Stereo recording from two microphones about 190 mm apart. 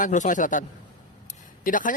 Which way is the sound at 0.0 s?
40° left (ahead or behind).